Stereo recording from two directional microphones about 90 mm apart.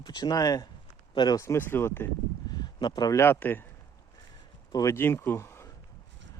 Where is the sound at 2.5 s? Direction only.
50° left (ahead or behind).